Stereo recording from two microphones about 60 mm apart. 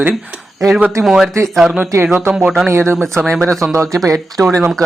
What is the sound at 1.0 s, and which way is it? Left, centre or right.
Speech, centre.